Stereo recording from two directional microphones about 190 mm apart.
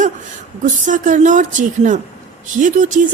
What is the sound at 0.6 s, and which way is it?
A woman's voice, 40° right (ahead or behind).